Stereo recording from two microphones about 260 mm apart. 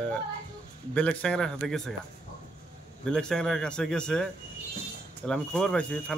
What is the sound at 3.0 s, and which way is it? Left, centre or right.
Speech, centre.